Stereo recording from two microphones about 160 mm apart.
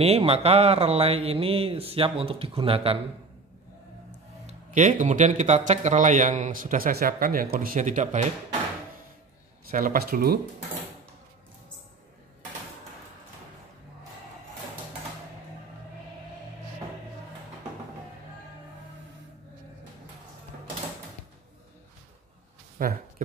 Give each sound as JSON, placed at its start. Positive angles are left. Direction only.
{"t": 0.0, "sound": "speech", "side_deg": -40}
{"t": 4.5, "sound": "speech", "side_deg": -50}
{"t": 9.7, "sound": "speech", "side_deg": -60}
{"t": 22.8, "sound": "a sound", "side_deg": -60}